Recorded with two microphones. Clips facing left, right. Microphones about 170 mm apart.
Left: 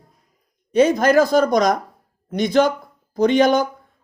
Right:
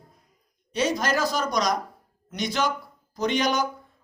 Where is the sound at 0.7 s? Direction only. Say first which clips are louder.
Left 11 dB; 55° left (ahead or behind).